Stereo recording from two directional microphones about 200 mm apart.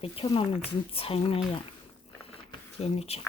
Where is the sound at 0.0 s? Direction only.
25° left (ahead or behind).